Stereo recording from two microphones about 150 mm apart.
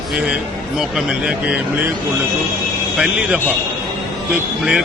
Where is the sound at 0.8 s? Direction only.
5° right (ahead or behind).